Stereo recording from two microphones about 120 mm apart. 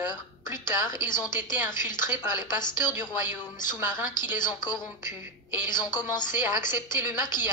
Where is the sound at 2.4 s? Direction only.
35° left (ahead or behind).